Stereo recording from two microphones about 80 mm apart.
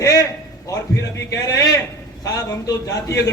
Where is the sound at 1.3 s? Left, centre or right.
Left.